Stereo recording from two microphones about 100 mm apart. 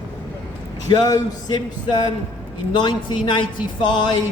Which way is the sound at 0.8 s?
45° left (ahead or behind).